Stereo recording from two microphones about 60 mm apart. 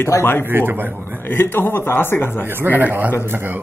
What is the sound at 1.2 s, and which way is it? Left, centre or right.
A man's voice, left.